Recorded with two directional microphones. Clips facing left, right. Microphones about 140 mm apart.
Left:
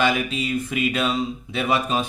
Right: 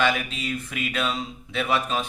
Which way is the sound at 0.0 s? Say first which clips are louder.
Left 3 dB; 10° left (ahead or behind).